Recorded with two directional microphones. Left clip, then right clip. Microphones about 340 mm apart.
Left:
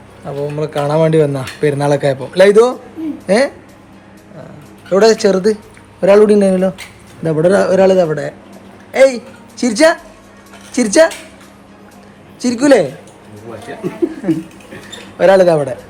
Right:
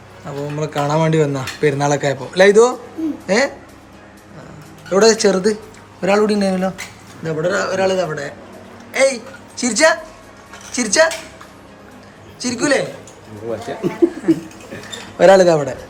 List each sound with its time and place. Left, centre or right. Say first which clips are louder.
0.5 s a man's voice: left 3 dB; centre
4.9 s a man's voice: left 3 dB; centre
12.4 s a man's voice: left 7 dB; centre
15.2 s speech: left 1 dB; centre